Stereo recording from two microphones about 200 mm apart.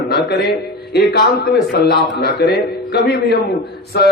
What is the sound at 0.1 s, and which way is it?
A man's voice, 50° left (ahead or behind).